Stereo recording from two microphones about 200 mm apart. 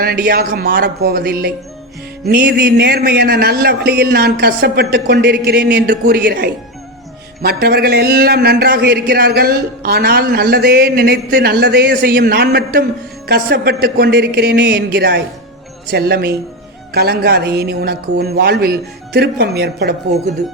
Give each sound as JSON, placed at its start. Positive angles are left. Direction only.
{"t": 0.0, "sound": "a man's voice", "side_deg": -50}